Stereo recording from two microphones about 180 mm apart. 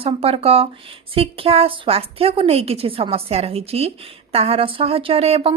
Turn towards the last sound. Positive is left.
turn(degrees=-35)  # may be behind; listen again after turning